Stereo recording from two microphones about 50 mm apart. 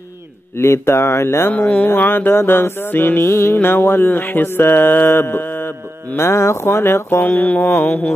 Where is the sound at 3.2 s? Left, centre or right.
Left.